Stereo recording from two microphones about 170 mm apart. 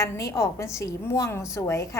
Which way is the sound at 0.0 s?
20° left (ahead or behind).